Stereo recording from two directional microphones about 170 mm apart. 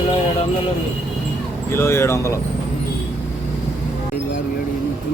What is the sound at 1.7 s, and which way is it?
Speech, 15° left (ahead or behind).